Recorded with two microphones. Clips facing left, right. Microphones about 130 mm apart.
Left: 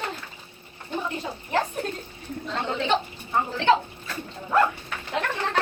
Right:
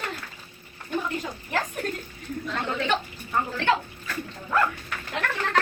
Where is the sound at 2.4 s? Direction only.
25° left (ahead or behind).